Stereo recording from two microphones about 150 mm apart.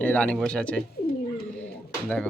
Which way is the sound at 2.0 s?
10° left (ahead or behind).